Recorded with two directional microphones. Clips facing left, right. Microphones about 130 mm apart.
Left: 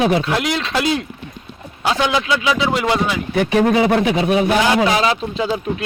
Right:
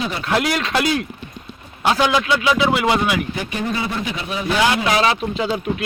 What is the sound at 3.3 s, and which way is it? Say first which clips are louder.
A man's voice: left 9 dB; 80° left.